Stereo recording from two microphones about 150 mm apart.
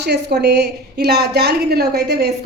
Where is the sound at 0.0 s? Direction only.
90° right.